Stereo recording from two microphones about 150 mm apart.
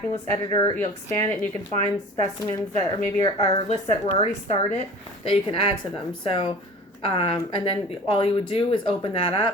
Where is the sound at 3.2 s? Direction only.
25° left (ahead or behind).